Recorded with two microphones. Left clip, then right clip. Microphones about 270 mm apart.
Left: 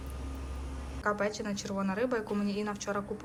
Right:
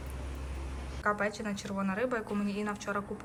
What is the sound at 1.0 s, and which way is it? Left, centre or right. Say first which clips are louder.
A woman's voice: even; centre.